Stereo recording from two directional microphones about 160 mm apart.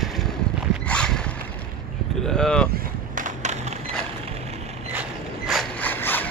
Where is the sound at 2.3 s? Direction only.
5° left (ahead or behind).